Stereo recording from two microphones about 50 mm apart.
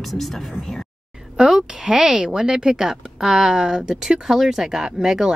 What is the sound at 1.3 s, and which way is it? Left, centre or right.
Speech, centre.